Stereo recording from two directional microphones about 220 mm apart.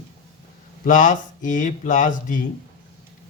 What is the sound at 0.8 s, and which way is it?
Speech, 35° left (ahead or behind).